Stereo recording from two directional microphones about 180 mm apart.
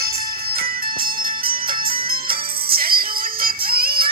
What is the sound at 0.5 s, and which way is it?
Music, 55° right (ahead or behind).